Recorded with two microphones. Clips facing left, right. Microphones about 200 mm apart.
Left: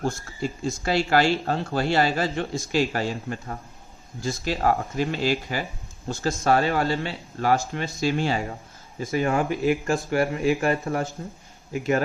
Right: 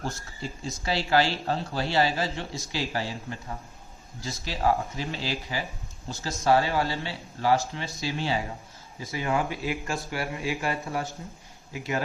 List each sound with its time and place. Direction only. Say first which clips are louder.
0.6 s speech: left 5 dB; 50° left (ahead or behind)